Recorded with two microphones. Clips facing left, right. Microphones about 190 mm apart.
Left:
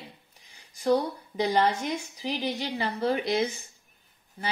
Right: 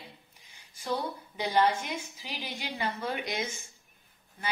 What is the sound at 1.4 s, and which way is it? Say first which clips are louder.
A woman's voice: left 2 dB; 40° left (ahead or behind).